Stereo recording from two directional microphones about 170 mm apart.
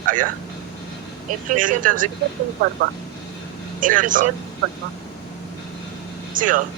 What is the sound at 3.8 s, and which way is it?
Speech, 50° right (ahead or behind).